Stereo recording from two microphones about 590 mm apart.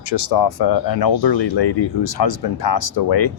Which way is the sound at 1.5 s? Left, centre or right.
Left.